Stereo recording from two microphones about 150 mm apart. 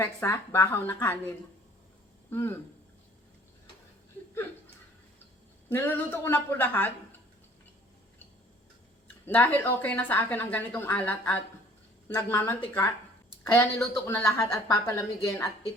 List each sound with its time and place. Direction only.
0.0 s speech: 15° left (ahead or behind)
2.3 s speech: 15° left (ahead or behind)
5.6 s speech: 15° left (ahead or behind)
9.2 s speech: 15° left (ahead or behind)